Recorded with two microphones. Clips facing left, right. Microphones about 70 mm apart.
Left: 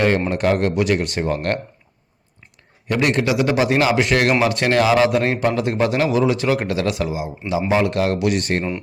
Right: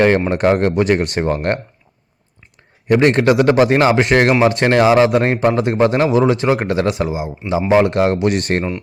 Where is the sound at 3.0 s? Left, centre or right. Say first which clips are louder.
Right 5 dB; right.